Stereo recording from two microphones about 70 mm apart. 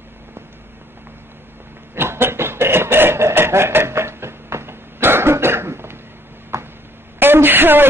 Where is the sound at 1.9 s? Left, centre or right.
Right.